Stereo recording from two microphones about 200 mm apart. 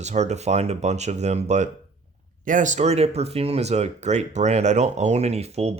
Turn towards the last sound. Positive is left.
turn(degrees=-30)  # may be behind; listen again after turning